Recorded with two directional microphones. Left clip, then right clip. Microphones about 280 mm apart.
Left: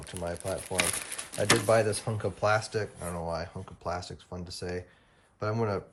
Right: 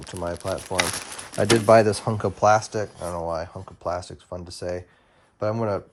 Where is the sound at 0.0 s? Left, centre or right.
Right.